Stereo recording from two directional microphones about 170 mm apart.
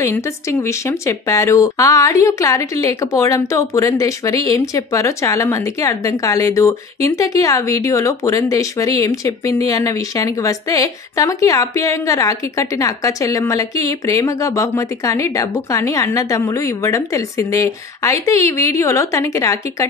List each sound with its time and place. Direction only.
0.0 s a woman's voice: 15° left (ahead or behind)